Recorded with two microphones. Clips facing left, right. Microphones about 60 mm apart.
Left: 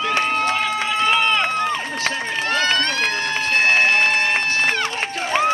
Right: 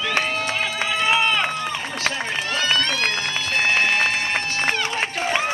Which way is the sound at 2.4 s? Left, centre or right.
Left.